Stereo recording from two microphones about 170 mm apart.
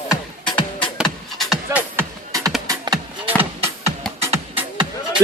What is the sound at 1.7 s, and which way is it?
Music, 15° right (ahead or behind).